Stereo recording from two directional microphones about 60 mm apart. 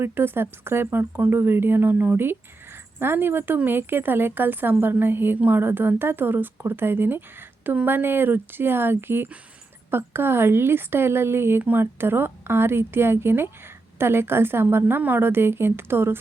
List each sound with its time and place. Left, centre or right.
0.0 s speech: right